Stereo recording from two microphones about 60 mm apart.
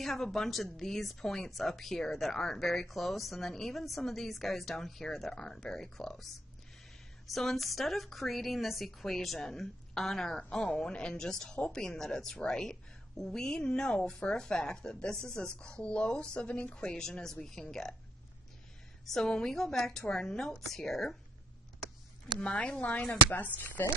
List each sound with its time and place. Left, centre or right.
0.0 s speech: centre
19.0 s speech: centre
22.4 s a woman's voice: centre